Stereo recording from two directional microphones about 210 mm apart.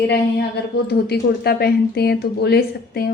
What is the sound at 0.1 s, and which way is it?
A woman's voice, 50° left (ahead or behind).